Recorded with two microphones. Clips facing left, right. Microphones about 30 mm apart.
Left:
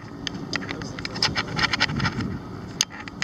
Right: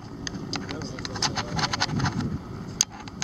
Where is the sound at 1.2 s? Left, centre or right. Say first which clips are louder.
Left 4 dB; left.